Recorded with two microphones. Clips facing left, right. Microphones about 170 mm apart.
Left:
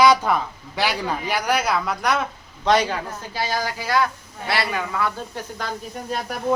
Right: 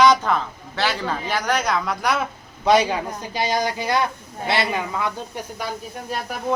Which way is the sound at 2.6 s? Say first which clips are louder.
Right 2 dB; 10° right (ahead or behind).